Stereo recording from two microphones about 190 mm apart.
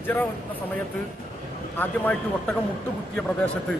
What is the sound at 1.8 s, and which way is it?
A man's voice, 10° left (ahead or behind).